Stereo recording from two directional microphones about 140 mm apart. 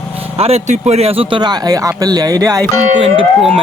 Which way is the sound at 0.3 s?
45° right (ahead or behind).